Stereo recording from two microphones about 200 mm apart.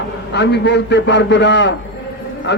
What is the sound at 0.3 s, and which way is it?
A man's voice, 60° left (ahead or behind).